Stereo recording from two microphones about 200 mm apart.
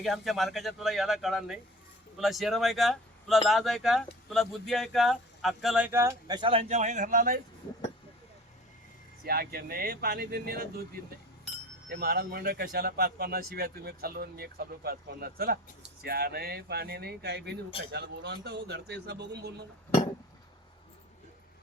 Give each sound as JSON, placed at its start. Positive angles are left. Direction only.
{"t": 0.0, "sound": "speech", "side_deg": 0}
{"t": 9.2, "sound": "speech", "side_deg": -50}
{"t": 11.9, "sound": "speech", "side_deg": -55}